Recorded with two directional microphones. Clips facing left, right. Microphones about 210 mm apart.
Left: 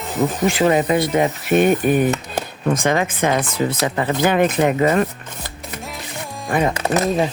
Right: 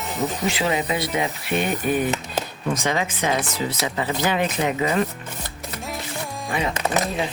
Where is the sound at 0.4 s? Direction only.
50° left (ahead or behind).